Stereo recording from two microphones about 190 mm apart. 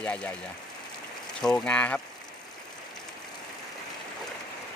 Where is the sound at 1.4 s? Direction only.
5° left (ahead or behind).